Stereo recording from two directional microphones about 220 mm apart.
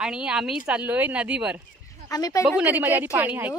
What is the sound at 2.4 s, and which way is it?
A woman's voice, 5° right (ahead or behind).